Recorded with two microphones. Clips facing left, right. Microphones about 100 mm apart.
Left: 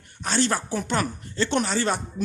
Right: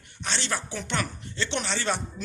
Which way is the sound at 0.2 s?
45° left (ahead or behind).